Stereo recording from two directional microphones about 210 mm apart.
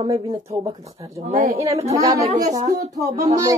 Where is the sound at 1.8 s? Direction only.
15° right (ahead or behind).